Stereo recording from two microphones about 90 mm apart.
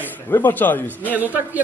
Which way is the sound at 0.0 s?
20° left (ahead or behind).